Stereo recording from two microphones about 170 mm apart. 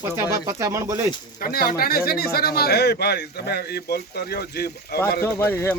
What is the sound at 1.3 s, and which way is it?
Speech, 60° left (ahead or behind).